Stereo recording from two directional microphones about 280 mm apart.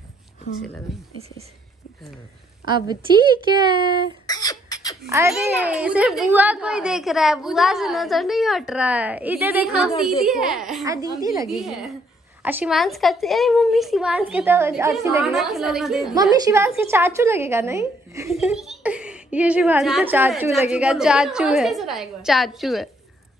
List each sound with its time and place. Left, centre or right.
2.9 s speech: centre
4.3 s beatboxing: centre
5.0 s speech: centre
10.9 s speech: centre
11.4 s speech: centre